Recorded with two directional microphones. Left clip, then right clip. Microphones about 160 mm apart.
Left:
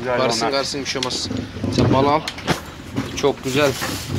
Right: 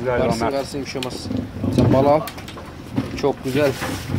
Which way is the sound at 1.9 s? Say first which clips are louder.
Right 2 dB; 25° right (ahead or behind).